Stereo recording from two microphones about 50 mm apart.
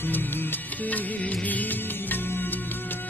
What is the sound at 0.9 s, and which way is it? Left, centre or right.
Music, left.